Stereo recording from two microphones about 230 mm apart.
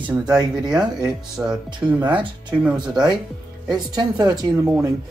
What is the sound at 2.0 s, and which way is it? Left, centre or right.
Speech, centre.